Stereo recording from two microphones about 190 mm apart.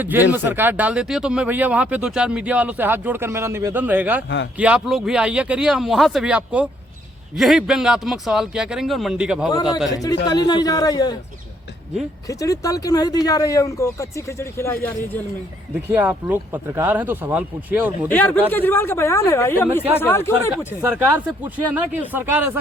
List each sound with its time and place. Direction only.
0.0 s speech: 10° right (ahead or behind)
9.9 s a man's voice: 20° left (ahead or behind)
12.3 s speech: 15° left (ahead or behind)
15.9 s speech: 10° right (ahead or behind)
18.1 s speech: 10° left (ahead or behind)
20.8 s speech: 5° right (ahead or behind)